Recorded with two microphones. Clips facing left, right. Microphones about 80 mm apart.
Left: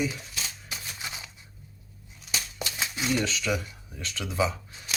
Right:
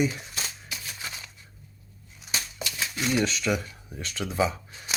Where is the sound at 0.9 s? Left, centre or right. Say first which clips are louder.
Even; centre.